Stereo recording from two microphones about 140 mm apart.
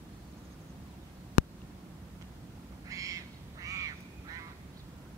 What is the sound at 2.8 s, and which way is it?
Duck, 25° right (ahead or behind).